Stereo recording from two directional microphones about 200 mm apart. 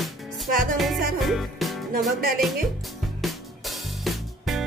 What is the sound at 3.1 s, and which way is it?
Music, centre (ahead or behind).